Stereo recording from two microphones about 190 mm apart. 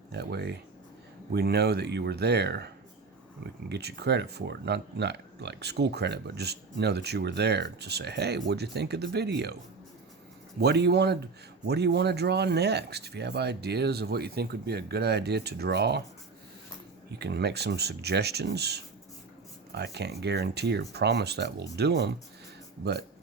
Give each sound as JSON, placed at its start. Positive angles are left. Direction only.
{"t": 0.1, "sound": "speech", "side_deg": -60}
{"t": 3.7, "sound": "speech", "side_deg": -60}
{"t": 10.6, "sound": "speech", "side_deg": -60}
{"t": 17.1, "sound": "speech", "side_deg": -60}